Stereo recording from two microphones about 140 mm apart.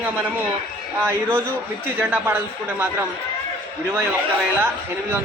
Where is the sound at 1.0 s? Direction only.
15° right (ahead or behind).